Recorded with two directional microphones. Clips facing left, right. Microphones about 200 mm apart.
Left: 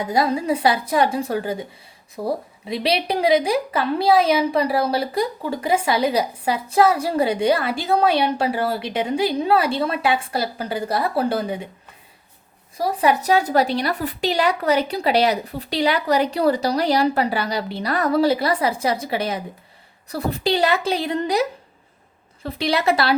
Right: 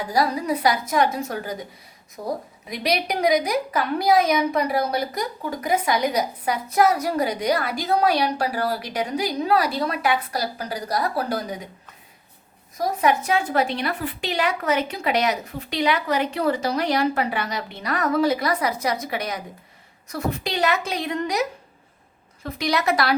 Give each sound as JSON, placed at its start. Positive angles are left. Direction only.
{"t": 0.0, "sound": "a woman's voice", "side_deg": 25}
{"t": 12.7, "sound": "a woman's voice", "side_deg": 30}
{"t": 22.4, "sound": "a woman's voice", "side_deg": 30}